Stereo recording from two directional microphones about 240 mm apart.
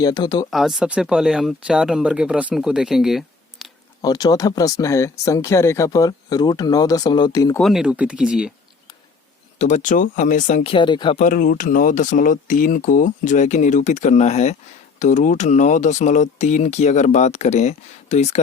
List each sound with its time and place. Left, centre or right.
0.0 s speech: centre
0.5 s speech: centre
4.0 s speech: centre
7.6 s speech: centre
9.6 s speech: left
11.2 s speech: left